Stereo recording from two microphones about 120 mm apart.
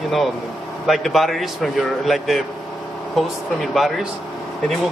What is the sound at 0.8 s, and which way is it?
Speech, centre (ahead or behind).